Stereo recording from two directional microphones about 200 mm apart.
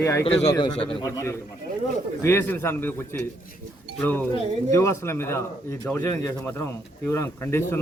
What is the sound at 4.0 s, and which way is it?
A man's voice, 10° left (ahead or behind).